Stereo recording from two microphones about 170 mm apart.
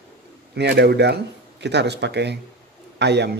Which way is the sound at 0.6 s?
80° right.